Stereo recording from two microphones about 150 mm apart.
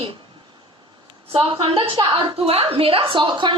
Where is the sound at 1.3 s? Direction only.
35° right (ahead or behind).